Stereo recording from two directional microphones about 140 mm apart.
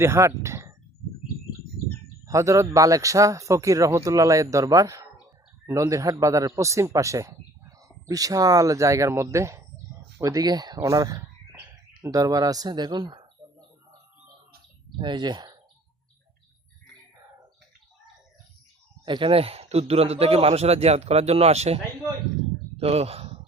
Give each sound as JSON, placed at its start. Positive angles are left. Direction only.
{"t": 0.0, "sound": "speech", "side_deg": -20}
{"t": 2.2, "sound": "a man's voice", "side_deg": -20}
{"t": 14.9, "sound": "speech", "side_deg": -35}
{"t": 19.0, "sound": "a man's voice", "side_deg": -35}
{"t": 22.8, "sound": "speech", "side_deg": -45}